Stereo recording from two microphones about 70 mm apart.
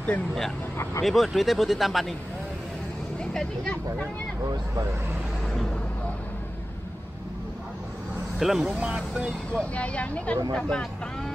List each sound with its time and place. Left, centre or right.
1.0 s speech: centre
8.4 s speech: centre
9.5 s speech: centre